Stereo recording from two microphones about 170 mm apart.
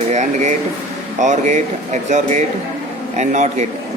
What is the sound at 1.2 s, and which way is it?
A man's voice, 45° right (ahead or behind).